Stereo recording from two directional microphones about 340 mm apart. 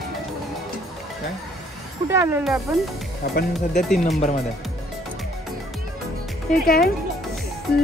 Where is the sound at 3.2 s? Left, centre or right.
Left.